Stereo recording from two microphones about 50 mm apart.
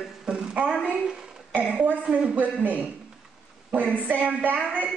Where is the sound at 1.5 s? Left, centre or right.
Right.